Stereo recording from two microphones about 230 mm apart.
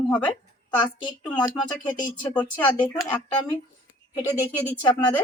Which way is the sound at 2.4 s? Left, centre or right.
Centre.